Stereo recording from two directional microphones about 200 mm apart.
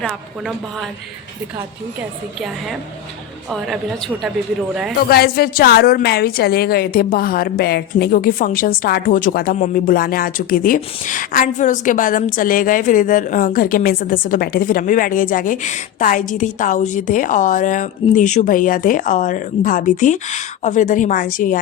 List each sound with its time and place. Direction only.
0.0 s speech: centre (ahead or behind)
4.7 s speech: 5° right (ahead or behind)
4.9 s a woman's voice: 50° left (ahead or behind)